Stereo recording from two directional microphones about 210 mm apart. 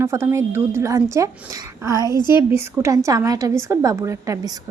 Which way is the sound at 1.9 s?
20° left (ahead or behind).